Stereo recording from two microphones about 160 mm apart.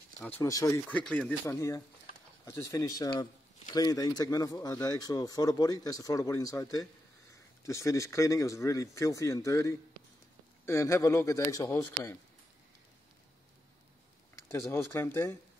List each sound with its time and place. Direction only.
0.4 s speech: 20° left (ahead or behind)
14.3 s speech: 15° left (ahead or behind)